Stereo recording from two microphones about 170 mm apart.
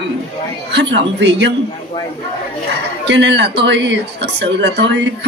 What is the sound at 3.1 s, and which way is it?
Speech, 90° right.